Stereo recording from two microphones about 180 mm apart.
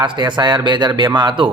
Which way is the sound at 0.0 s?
25° right (ahead or behind).